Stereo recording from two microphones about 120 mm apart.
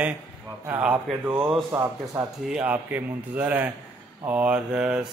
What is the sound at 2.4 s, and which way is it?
Speech, 10° right (ahead or behind).